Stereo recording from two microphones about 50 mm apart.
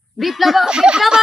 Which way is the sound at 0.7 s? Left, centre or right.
Centre.